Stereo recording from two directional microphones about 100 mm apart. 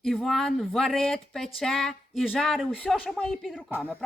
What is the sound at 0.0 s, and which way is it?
Speech, centre (ahead or behind).